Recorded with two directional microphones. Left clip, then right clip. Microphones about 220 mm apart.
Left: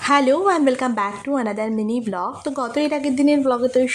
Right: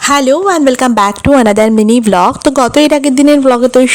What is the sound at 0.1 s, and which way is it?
Speech, 35° right (ahead or behind).